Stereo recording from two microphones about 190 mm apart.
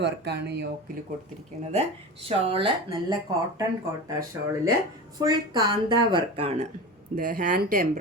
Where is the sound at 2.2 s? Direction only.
30° right (ahead or behind).